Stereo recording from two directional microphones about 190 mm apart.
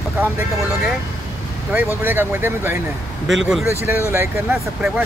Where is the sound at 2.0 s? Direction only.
10° right (ahead or behind).